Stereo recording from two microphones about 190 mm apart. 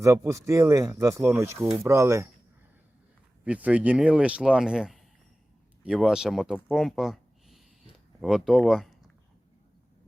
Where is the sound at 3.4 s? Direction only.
5° right (ahead or behind).